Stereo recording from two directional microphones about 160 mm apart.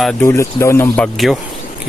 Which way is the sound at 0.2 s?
20° left (ahead or behind).